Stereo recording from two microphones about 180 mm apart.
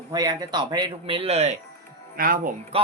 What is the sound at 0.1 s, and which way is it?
Speech, 20° right (ahead or behind).